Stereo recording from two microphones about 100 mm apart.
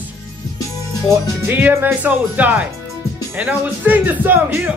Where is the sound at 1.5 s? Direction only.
20° right (ahead or behind).